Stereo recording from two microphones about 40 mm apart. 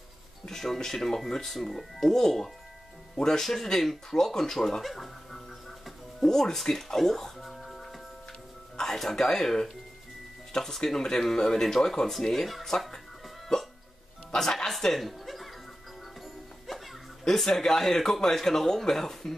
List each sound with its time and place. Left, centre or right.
0.5 s speech: centre
7.7 s music: centre
8.7 s speech: centre
14.8 s chuckle: centre
16.2 s music: centre
17.5 s speech: centre